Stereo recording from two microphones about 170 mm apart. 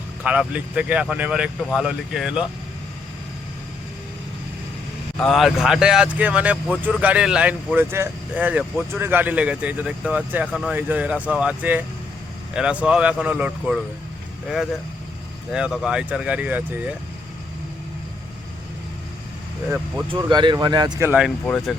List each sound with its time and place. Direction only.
0.2 s speech: 5° right (ahead or behind)
5.2 s speech: centre (ahead or behind)
20.1 s speech: 25° right (ahead or behind)
21.1 s speech: 5° right (ahead or behind)
21.4 s speech: 5° left (ahead or behind)